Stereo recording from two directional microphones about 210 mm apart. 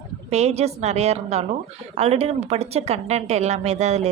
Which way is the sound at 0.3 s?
30° right (ahead or behind).